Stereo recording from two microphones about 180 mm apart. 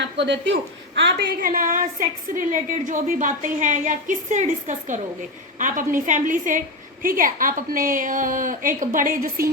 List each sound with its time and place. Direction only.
0.0 s speech: 75° right (ahead or behind)
1.4 s a woman's voice: 50° right (ahead or behind)